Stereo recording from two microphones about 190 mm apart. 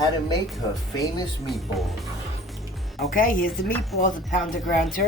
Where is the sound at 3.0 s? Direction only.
45° left (ahead or behind).